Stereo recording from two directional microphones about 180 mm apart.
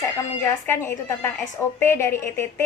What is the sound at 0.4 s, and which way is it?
A woman's voice, 15° left (ahead or behind).